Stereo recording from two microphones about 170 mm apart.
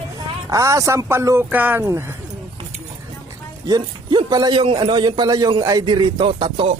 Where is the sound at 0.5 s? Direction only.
20° right (ahead or behind).